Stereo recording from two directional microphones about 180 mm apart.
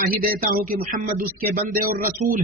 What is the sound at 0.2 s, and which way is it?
A man's voice, 50° right (ahead or behind).